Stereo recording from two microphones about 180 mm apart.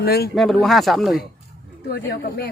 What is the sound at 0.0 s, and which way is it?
Speech, 60° left (ahead or behind).